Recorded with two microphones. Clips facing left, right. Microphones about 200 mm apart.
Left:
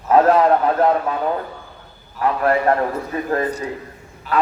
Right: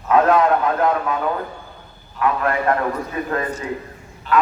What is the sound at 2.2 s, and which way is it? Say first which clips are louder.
Speech: left 2 dB; 35° left (ahead or behind).